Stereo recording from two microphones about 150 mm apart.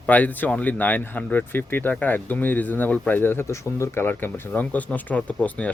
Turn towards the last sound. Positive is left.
turn(degrees=10)  # may be behind; listen again after turning